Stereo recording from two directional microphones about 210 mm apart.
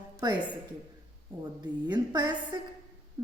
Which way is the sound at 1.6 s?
20° right (ahead or behind).